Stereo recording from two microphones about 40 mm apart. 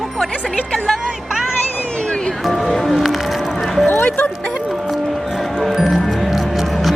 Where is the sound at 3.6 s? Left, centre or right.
Centre.